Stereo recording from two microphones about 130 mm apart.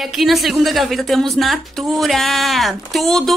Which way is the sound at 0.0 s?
Centre (ahead or behind).